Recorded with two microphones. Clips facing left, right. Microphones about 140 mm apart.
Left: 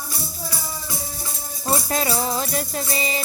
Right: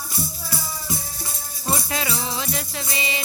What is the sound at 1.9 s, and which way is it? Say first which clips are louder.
Music: left 4 dB; 40° left (ahead or behind).